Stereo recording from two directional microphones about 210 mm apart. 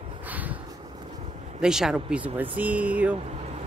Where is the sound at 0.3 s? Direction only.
5° right (ahead or behind).